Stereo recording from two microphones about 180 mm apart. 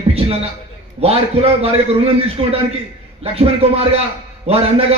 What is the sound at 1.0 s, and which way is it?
A man's voice, 35° right (ahead or behind).